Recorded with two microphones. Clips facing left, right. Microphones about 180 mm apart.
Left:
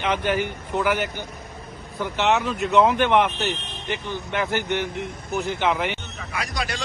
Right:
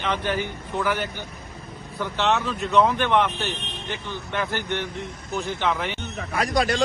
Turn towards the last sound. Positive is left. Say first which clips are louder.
# right 7 dB
turn(degrees=-45)  # may be behind; listen again after turning